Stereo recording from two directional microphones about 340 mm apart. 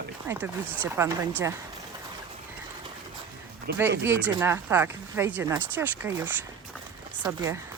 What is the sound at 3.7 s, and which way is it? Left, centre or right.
Speech, right.